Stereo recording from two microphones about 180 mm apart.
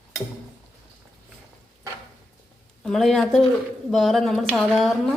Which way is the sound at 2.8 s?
Centre (ahead or behind).